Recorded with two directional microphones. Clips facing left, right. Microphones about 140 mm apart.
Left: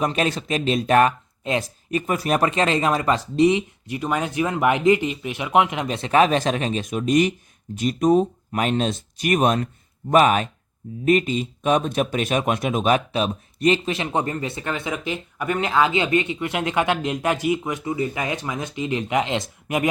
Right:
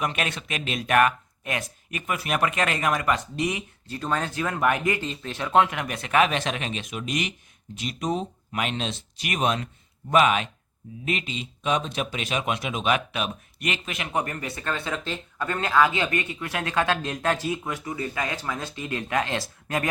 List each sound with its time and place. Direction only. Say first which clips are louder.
0.0 s speech: left 6 dB; 35° left (ahead or behind)
3.8 s speech: left 1 dB; 15° left (ahead or behind)